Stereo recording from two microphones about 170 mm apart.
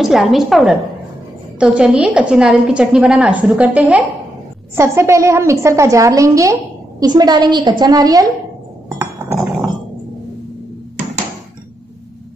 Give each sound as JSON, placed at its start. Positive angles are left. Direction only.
{"t": 0.0, "sound": "a woman's voice", "side_deg": 0}
{"t": 8.8, "sound": "chink", "side_deg": -15}